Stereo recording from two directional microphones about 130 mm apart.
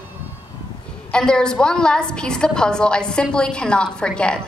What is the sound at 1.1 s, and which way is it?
A woman's voice, 5° left (ahead or behind).